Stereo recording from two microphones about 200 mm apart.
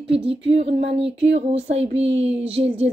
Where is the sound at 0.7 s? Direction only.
65° right (ahead or behind).